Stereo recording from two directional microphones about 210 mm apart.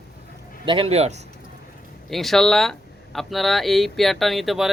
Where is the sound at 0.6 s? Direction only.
25° right (ahead or behind).